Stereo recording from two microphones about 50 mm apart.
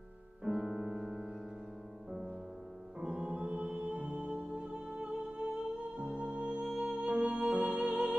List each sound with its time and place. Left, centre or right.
0.4 s music: centre
3.0 s music: centre